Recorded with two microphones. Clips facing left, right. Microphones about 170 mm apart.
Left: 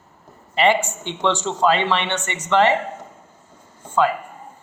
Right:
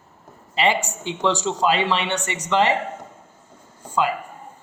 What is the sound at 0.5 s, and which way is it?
A man's voice, 10° right (ahead or behind).